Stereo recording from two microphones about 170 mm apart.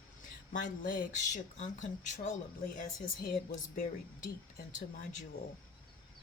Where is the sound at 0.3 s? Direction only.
50° left (ahead or behind).